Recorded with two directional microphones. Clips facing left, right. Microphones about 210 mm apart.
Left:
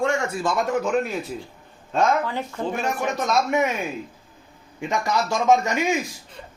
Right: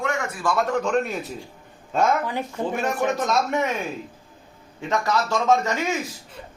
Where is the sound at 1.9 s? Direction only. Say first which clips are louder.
Even; 10° right (ahead or behind).